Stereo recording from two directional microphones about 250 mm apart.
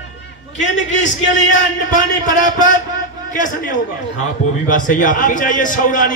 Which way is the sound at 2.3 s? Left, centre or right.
Left.